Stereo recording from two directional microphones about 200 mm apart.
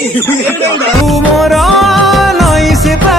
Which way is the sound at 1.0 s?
Centre (ahead or behind).